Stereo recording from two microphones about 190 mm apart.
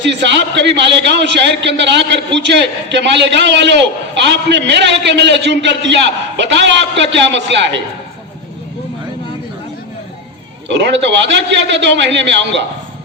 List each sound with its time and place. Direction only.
0.0 s a man's voice: 70° right (ahead or behind)
10.7 s a man's voice: 70° right (ahead or behind)